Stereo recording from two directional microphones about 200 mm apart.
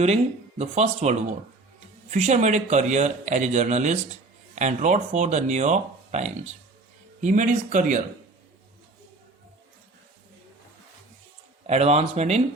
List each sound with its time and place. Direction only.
0.6 s speech: 35° right (ahead or behind)
11.6 s speech: 35° right (ahead or behind)